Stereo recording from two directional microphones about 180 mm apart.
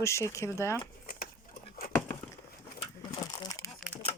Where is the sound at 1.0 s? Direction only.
55° left (ahead or behind).